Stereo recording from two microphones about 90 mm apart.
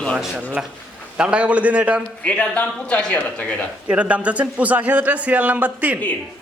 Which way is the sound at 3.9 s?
15° right (ahead or behind).